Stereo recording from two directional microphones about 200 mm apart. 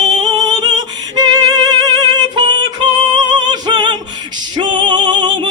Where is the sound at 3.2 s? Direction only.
20° right (ahead or behind).